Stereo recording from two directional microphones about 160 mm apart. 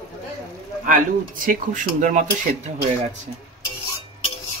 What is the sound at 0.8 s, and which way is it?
Speech, 60° right (ahead or behind).